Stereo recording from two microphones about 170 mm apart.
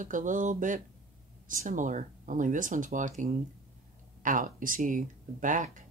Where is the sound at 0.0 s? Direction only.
50° right (ahead or behind).